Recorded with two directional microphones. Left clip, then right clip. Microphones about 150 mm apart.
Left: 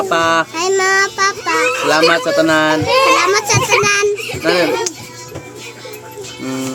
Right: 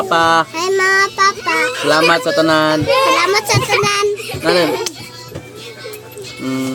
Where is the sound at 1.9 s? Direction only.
20° right (ahead or behind).